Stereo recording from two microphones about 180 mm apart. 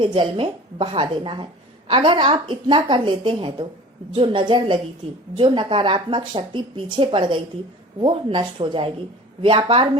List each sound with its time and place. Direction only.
0.0 s speech: 25° right (ahead or behind)